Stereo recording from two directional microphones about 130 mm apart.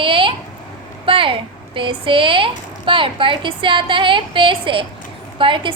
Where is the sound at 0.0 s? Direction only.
40° right (ahead or behind).